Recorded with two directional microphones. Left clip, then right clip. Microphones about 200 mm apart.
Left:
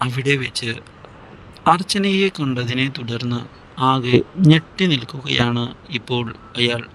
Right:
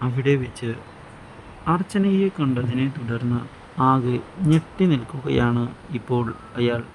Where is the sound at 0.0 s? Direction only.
45° left (ahead or behind).